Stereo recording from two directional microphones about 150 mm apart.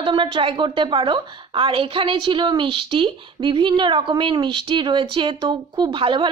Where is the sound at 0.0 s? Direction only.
35° right (ahead or behind).